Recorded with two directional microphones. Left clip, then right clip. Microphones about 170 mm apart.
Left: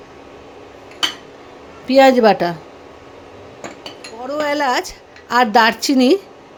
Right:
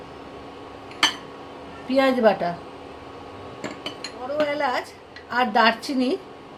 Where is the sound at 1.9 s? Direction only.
65° left (ahead or behind).